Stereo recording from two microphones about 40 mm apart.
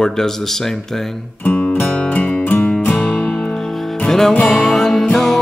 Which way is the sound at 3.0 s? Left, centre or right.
Left.